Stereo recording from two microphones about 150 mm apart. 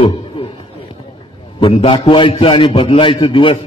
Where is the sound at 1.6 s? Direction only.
35° left (ahead or behind).